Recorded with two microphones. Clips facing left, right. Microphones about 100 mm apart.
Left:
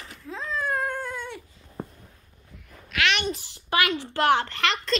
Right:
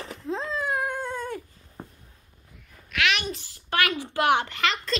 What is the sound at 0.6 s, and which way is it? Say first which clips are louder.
Dog: left 2 dB; 15° right (ahead or behind).